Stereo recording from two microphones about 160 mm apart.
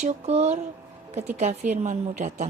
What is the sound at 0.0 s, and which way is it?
Speech, 40° right (ahead or behind).